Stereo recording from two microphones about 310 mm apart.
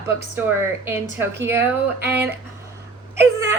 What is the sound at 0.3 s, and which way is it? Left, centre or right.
A woman's voice, centre.